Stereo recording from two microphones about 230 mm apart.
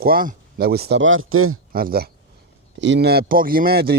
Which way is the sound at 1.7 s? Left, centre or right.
Right.